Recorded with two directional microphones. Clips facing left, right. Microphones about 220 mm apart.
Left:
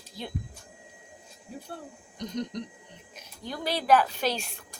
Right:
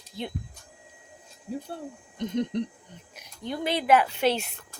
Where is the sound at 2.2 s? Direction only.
25° right (ahead or behind).